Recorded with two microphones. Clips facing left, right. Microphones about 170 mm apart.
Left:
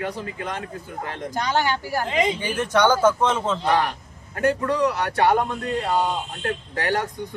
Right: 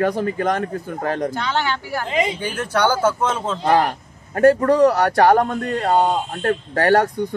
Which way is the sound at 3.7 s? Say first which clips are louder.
Right 7 dB; 50° right (ahead or behind).